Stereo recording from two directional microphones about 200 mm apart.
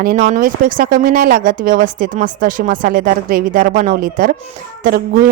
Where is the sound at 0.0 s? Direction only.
40° right (ahead or behind).